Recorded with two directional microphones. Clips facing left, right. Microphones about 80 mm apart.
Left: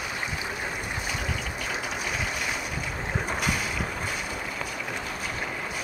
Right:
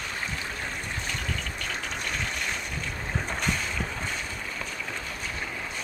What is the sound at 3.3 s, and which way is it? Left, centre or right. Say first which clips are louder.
Boat: left 1 dB; centre.